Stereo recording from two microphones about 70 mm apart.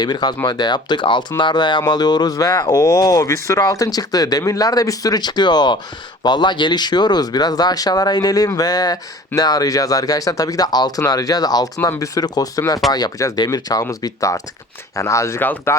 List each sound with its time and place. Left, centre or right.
0.0 s speech: left
3.6 s speech: left
11.0 s speech: left
11.8 s speech: left
12.1 s speech: left
15.4 s speech: left